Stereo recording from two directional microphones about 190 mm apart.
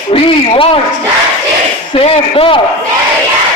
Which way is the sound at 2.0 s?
30° left (ahead or behind).